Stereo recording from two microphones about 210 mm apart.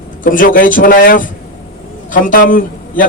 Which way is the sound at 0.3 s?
40° left (ahead or behind).